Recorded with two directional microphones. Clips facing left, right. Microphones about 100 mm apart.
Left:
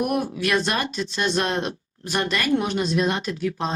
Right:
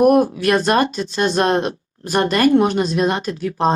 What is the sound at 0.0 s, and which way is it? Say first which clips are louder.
A woman's voice: right 10 dB; 45° right (ahead or behind).